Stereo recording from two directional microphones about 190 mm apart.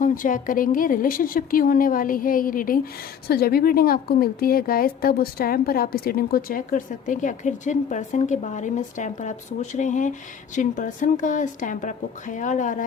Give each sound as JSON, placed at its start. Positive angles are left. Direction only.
{"t": 0.0, "sound": "a woman's voice", "side_deg": 45}